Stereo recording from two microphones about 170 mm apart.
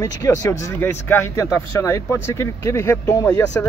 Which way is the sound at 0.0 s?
20° left (ahead or behind).